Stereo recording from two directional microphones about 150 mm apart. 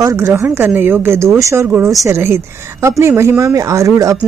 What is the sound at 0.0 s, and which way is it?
Speech, 15° right (ahead or behind).